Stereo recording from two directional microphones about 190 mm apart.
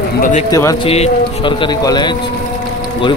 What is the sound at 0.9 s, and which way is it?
Speech, 30° left (ahead or behind).